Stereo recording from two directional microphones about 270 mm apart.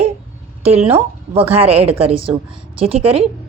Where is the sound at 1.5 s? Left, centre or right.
Right.